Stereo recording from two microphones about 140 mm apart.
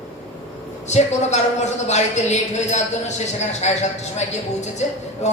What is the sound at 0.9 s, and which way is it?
A man's voice, 55° left (ahead or behind).